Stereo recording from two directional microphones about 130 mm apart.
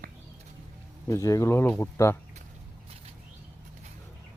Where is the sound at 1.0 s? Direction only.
25° left (ahead or behind).